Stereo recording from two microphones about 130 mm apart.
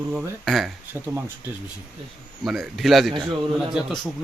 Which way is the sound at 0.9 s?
15° right (ahead or behind).